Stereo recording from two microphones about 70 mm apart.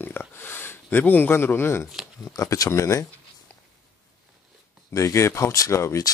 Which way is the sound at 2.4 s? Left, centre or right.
Left.